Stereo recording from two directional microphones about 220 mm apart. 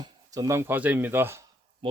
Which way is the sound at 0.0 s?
15° right (ahead or behind).